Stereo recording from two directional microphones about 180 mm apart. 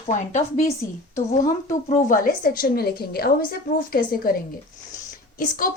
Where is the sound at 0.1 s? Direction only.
40° left (ahead or behind).